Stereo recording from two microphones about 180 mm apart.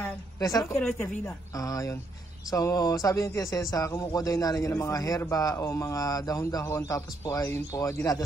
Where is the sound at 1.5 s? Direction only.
20° left (ahead or behind).